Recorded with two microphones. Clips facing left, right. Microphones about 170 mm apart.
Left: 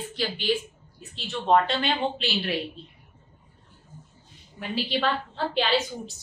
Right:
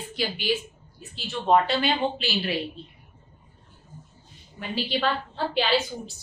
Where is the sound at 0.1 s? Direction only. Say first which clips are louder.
Even; 10° right (ahead or behind).